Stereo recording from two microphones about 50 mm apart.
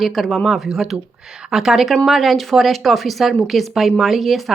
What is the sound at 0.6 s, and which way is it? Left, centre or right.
A woman's voice, centre.